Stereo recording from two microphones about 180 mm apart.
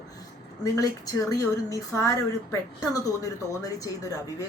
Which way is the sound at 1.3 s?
20° left (ahead or behind).